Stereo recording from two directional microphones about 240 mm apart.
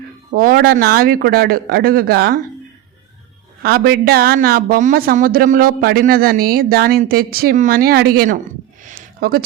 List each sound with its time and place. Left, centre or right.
0.3 s speech: right
3.6 s speech: right
8.9 s a sound: right